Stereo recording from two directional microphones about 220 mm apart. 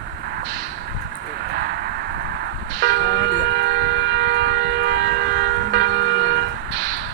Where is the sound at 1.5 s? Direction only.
45° right (ahead or behind).